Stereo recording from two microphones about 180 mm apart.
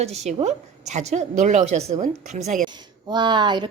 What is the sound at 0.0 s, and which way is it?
A woman's voice, 40° right (ahead or behind).